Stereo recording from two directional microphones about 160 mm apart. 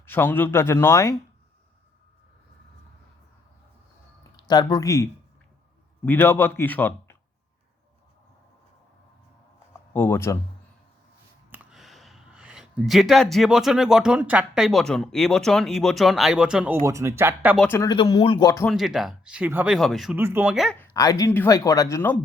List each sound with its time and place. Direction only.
0.0 s a man's voice: 15° left (ahead or behind)
4.4 s speech: 25° left (ahead or behind)
6.1 s a man's voice: 10° left (ahead or behind)
9.9 s a man's voice: 15° left (ahead or behind)
11.5 s speech: centre (ahead or behind)
16.8 s speech: 20° right (ahead or behind)
17.6 s a man's voice: 15° left (ahead or behind)
17.8 s speech: 30° left (ahead or behind)
18.7 s speech: centre (ahead or behind)
19.7 s speech: centre (ahead or behind)
20.1 s speech: 15° right (ahead or behind)
20.7 s speech: 20° left (ahead or behind)